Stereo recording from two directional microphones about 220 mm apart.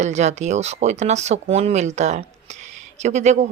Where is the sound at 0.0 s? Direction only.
30° right (ahead or behind).